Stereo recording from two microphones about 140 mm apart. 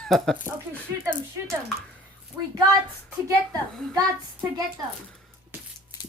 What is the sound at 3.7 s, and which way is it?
Speech, centre (ahead or behind).